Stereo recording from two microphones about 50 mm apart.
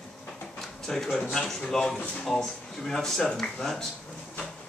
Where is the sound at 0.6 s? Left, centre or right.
Centre.